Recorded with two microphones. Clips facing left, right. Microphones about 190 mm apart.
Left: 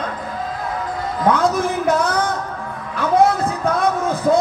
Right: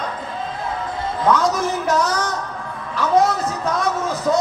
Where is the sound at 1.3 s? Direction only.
55° left (ahead or behind).